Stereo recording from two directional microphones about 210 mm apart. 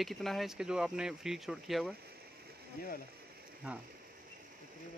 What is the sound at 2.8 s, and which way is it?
Speech, 45° left (ahead or behind).